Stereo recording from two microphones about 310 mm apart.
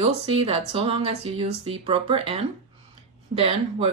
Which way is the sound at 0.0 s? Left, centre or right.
Centre.